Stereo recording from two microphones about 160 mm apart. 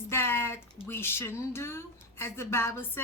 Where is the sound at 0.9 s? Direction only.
15° left (ahead or behind).